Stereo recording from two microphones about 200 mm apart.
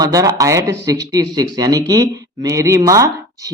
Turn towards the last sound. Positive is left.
turn(degrees=-15)  # may be behind; listen again after turning